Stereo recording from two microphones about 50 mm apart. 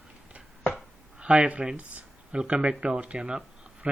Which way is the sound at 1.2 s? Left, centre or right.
Right.